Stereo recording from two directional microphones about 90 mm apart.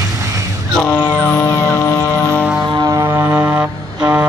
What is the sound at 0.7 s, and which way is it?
Music, 15° left (ahead or behind).